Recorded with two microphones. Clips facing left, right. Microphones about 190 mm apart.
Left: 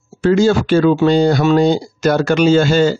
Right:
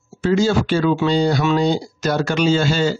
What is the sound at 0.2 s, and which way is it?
Speech, 55° left (ahead or behind).